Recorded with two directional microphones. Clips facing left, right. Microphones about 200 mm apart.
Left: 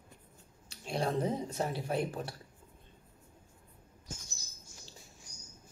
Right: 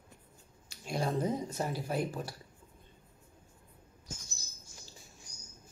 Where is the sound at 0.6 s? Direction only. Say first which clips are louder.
Even; 30° left (ahead or behind).